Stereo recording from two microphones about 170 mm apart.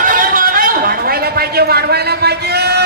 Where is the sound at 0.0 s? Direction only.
55° right (ahead or behind).